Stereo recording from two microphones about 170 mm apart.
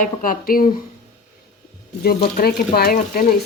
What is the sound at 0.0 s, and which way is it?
Speech, 50° left (ahead or behind).